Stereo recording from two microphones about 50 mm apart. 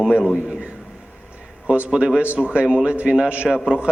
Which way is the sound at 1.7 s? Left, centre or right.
Right.